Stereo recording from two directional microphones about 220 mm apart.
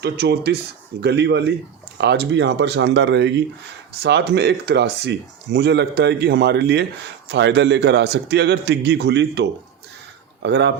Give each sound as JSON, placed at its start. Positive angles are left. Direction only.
{"t": 0.0, "sound": "speech", "side_deg": -45}